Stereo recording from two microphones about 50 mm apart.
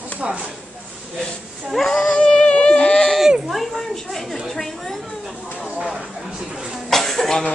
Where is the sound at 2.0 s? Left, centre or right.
Left.